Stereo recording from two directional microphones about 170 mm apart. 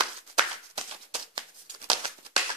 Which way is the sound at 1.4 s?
30° right (ahead or behind).